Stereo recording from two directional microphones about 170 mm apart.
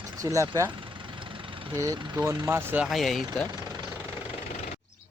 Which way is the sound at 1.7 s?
20° right (ahead or behind).